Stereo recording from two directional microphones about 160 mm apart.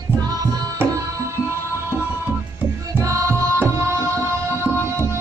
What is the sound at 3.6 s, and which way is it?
Tabla, 15° right (ahead or behind).